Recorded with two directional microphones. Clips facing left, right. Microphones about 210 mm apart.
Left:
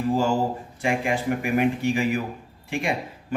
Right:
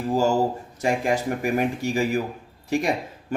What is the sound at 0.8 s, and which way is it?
A man's voice, 40° right (ahead or behind).